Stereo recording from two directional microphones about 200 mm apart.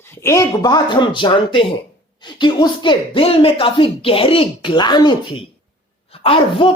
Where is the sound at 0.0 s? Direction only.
10° left (ahead or behind).